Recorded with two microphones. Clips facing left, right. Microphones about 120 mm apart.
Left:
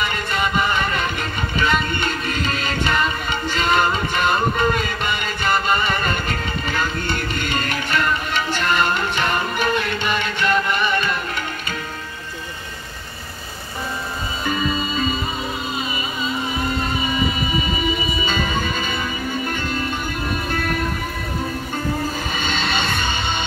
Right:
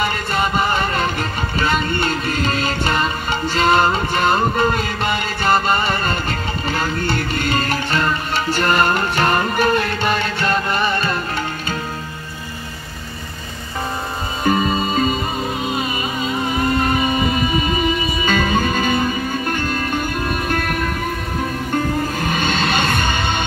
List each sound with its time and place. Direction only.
0.0 s music: 35° right (ahead or behind)
14.4 s music: 45° right (ahead or behind)
15.7 s vehicle: 55° right (ahead or behind)
20.4 s music: 55° right (ahead or behind)
22.2 s music: 50° right (ahead or behind)